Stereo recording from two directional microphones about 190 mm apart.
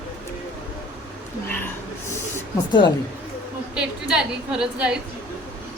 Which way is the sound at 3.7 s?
5° right (ahead or behind).